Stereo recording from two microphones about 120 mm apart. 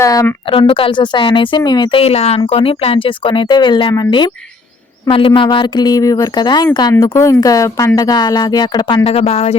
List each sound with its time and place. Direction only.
0.0 s a sound: 30° left (ahead or behind)
0.7 s speech: 45° left (ahead or behind)
2.0 s speech: 55° left (ahead or behind); by 9.0 s 35° left (ahead or behind)
9.0 s speech: 55° left (ahead or behind)